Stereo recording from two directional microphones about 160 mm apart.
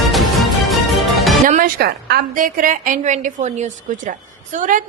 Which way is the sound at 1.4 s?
55° right (ahead or behind).